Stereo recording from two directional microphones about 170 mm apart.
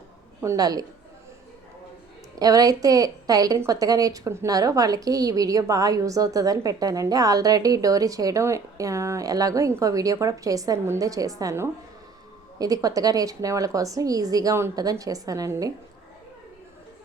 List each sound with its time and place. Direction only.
0.4 s a woman's voice: 20° right (ahead or behind)
2.4 s a woman's voice: 20° right (ahead or behind)